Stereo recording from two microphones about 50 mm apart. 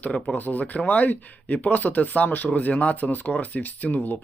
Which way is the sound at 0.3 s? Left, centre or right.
Left.